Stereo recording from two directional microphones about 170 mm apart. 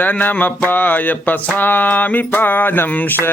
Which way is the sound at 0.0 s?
10° left (ahead or behind).